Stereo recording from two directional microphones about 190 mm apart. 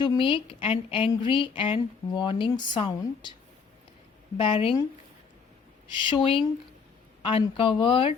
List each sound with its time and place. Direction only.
0.0 s a woman's voice: 25° left (ahead or behind)
4.4 s a woman's voice: 30° left (ahead or behind)
6.1 s a woman's voice: 25° left (ahead or behind)